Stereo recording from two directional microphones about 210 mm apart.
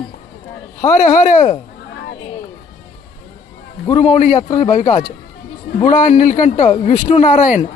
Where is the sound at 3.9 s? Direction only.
30° left (ahead or behind).